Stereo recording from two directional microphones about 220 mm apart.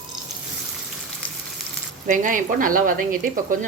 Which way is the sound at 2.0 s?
35° right (ahead or behind).